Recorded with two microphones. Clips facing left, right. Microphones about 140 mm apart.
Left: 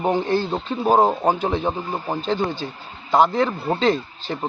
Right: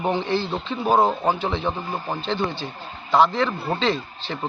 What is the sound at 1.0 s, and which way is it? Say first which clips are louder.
Speech: left 2 dB; 15° left (ahead or behind).